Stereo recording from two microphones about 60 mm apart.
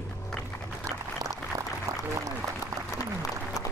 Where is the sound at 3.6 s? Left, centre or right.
Left.